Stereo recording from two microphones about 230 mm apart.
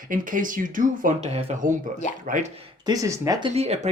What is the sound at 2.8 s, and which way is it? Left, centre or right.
Speech, centre.